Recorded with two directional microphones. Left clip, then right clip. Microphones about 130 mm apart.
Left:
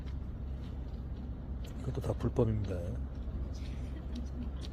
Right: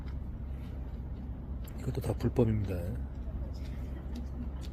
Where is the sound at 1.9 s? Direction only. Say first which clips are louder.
Right 2 dB; 45° right (ahead or behind).